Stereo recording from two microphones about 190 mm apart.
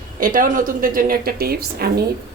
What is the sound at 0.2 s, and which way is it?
A woman's voice, 45° right (ahead or behind).